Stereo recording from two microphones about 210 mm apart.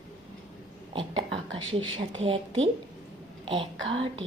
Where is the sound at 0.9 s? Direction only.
25° right (ahead or behind).